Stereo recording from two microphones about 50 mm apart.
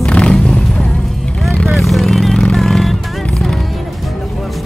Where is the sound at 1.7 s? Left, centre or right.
Centre.